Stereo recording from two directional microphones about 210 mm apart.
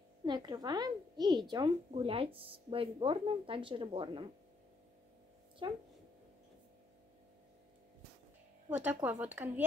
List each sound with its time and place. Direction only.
0.2 s a woman's voice: 20° right (ahead or behind)
5.6 s a woman's voice: 25° right (ahead or behind)
8.6 s speech: 10° right (ahead or behind)